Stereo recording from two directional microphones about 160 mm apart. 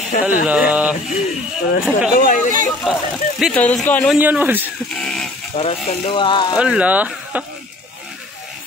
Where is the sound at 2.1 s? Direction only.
60° left (ahead or behind).